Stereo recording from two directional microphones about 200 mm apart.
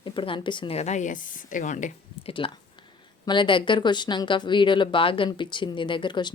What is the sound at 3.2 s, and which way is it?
Speech, 25° left (ahead or behind).